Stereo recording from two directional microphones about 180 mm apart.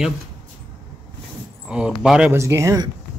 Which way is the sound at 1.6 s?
5° right (ahead or behind).